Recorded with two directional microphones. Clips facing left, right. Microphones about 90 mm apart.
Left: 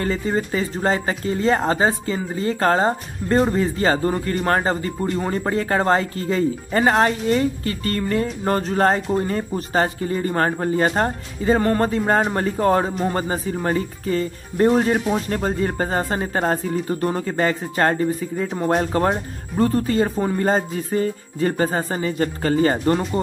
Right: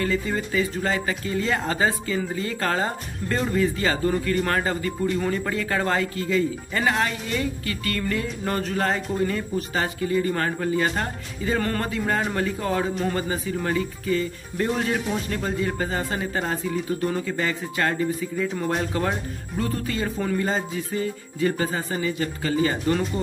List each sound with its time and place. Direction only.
0.0 s speech: 35° left (ahead or behind)
20.3 s speech: 45° left (ahead or behind)